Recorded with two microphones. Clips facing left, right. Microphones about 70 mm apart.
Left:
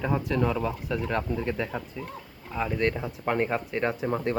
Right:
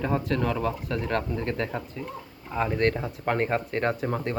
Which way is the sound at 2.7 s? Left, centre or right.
Centre.